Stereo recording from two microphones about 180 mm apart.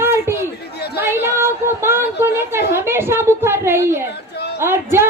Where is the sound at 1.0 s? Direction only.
15° right (ahead or behind).